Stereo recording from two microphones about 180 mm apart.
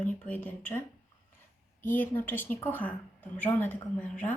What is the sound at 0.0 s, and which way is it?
Speech, 10° left (ahead or behind).